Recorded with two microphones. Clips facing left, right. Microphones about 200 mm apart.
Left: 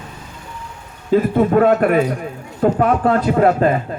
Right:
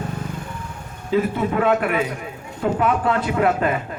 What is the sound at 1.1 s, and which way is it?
A man's voice, 50° left (ahead or behind).